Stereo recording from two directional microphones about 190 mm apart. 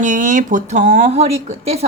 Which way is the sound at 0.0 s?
40° right (ahead or behind).